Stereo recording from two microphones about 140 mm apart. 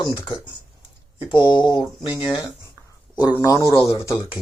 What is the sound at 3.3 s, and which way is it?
Speech, 25° left (ahead or behind).